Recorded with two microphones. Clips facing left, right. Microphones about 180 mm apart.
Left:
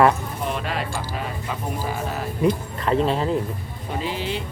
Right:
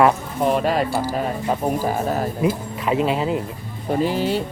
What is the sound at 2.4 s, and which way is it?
Speech, 5° right (ahead or behind).